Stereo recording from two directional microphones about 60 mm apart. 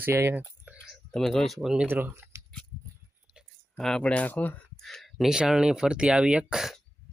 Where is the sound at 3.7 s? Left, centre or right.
Centre.